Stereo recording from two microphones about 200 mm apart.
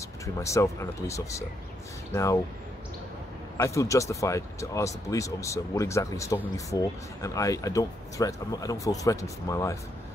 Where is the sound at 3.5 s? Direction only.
15° left (ahead or behind).